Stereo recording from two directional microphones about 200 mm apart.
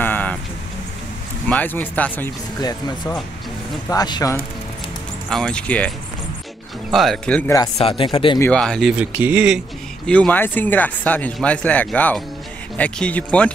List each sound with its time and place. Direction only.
0.0 s a sound: 10° left (ahead or behind)
1.5 s speech: 10° left (ahead or behind)
3.9 s speech: 20° left (ahead or behind)
5.3 s speech: 5° left (ahead or behind)
6.9 s speech: centre (ahead or behind)
7.7 s speech: 25° left (ahead or behind)
8.4 s speech: 5° left (ahead or behind)
10.0 s speech: 5° left (ahead or behind)